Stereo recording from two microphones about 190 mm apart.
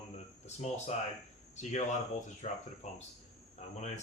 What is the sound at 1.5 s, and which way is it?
Speech, 40° left (ahead or behind).